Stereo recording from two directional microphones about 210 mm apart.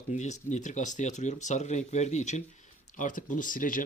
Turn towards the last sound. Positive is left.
turn(degrees=40)  # may be behind; listen again after turning